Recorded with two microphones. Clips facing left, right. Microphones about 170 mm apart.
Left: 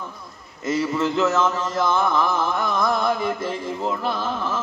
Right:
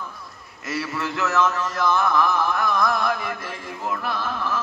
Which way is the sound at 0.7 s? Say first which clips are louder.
Left 6 dB; 20° left (ahead or behind).